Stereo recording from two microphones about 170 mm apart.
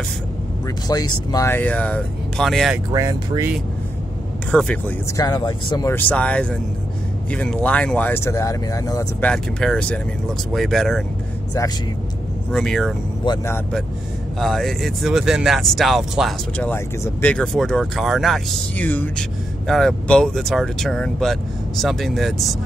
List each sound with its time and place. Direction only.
0.8 s speech: 20° left (ahead or behind); by 2.8 s centre (ahead or behind)
2.9 s speech: 20° right (ahead or behind)
4.5 s speech: 5° left (ahead or behind)
5.1 s speech: 25° left (ahead or behind)
5.9 s speech: 10° left (ahead or behind)
9.2 s speech: 5° left (ahead or behind)
12.4 s speech: 5° left (ahead or behind)